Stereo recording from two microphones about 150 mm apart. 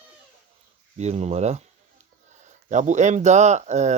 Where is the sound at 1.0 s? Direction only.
45° right (ahead or behind).